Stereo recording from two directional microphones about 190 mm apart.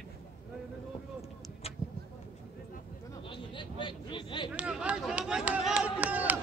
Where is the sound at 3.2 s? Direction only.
25° left (ahead or behind).